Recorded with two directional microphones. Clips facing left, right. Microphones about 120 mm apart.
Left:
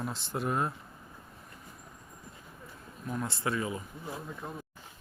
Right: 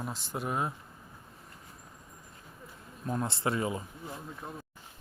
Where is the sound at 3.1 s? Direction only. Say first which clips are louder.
Right 2 dB; 30° right (ahead or behind).